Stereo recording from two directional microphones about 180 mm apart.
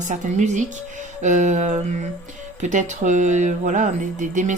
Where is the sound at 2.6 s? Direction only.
40° right (ahead or behind).